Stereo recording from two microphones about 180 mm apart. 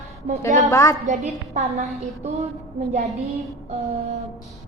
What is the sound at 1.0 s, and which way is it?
A woman's voice, 40° right (ahead or behind).